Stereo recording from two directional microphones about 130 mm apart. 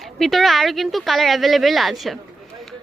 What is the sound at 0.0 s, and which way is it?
Speech, centre (ahead or behind).